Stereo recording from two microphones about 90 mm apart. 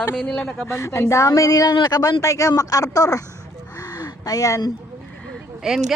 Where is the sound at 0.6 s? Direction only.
30° left (ahead or behind).